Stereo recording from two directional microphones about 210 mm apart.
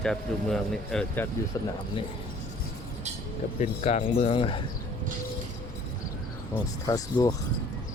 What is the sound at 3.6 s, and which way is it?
Speech, 30° left (ahead or behind).